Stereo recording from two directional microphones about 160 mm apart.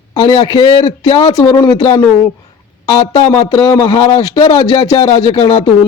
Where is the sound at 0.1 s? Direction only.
25° left (ahead or behind).